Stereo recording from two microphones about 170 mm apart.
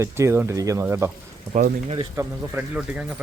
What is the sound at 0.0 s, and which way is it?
Speech, 15° right (ahead or behind).